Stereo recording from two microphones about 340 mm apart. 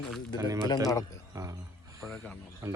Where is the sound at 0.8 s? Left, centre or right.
Centre.